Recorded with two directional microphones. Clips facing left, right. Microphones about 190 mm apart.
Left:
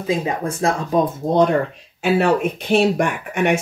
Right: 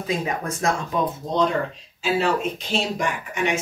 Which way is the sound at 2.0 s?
60° left (ahead or behind).